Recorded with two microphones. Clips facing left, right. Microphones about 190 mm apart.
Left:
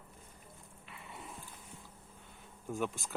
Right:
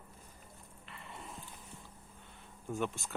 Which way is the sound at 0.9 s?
5° left (ahead or behind).